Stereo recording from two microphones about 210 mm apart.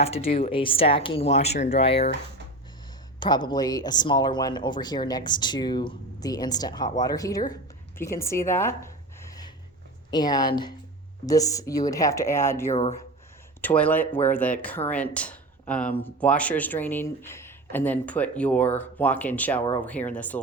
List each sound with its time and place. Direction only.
0.0 s speech: 30° left (ahead or behind)
3.2 s speech: 20° left (ahead or behind)
7.9 s a sound: 10° left (ahead or behind)
10.1 s speech: 20° left (ahead or behind)
12.7 s speech: 30° left (ahead or behind)
13.6 s speech: 10° left (ahead or behind)